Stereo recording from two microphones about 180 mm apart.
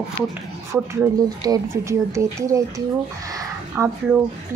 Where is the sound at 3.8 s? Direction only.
15° right (ahead or behind).